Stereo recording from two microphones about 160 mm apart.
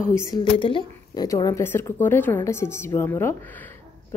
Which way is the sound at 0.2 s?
25° left (ahead or behind).